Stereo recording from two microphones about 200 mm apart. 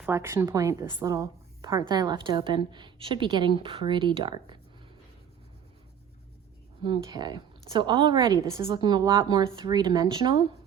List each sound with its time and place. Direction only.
0.0 s a woman's voice: 15° right (ahead or behind)
6.8 s a woman's voice: 20° right (ahead or behind)